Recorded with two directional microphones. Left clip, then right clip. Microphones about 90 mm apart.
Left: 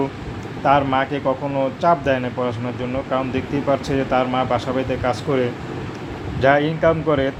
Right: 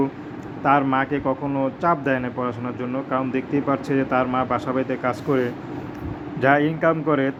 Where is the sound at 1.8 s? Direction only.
35° right (ahead or behind).